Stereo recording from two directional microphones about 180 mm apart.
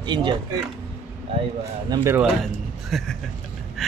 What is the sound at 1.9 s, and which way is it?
Speech, 15° right (ahead or behind).